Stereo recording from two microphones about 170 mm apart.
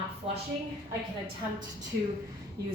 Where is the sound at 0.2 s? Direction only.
35° right (ahead or behind).